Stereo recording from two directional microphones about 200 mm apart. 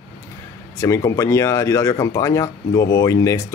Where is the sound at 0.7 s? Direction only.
15° left (ahead or behind).